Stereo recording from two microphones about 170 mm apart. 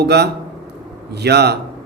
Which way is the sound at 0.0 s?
75° right (ahead or behind).